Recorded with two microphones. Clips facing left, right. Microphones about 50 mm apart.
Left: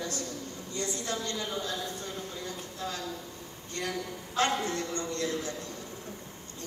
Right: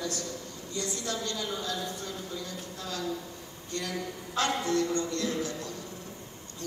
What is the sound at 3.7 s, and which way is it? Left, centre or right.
A man's voice, left.